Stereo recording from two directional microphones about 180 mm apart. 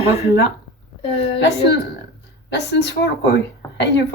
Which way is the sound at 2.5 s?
70° left (ahead or behind).